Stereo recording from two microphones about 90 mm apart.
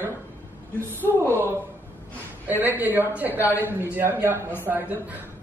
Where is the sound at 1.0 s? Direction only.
25° right (ahead or behind).